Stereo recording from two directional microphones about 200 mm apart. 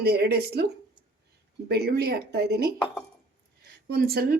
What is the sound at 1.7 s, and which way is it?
Speech, 50° right (ahead or behind).